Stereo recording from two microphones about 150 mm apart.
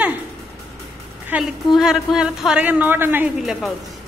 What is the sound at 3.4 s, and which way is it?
Speech, centre (ahead or behind).